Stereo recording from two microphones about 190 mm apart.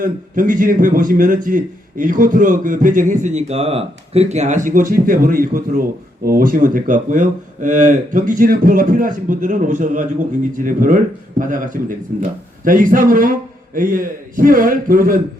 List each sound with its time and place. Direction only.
0.0 s a man's voice: 45° right (ahead or behind)